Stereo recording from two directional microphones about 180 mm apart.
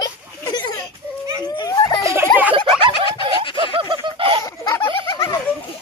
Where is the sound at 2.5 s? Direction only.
30° right (ahead or behind).